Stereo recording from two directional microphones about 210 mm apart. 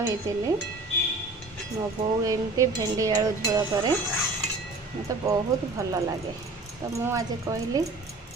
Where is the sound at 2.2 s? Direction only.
15° right (ahead or behind).